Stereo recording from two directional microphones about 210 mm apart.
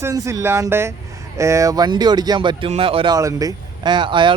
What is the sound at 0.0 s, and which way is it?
Speech, 15° right (ahead or behind).